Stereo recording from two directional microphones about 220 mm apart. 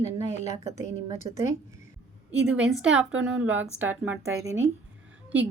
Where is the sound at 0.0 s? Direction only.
30° left (ahead or behind).